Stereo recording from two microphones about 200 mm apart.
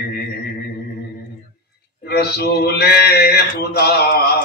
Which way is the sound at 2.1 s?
50° left (ahead or behind).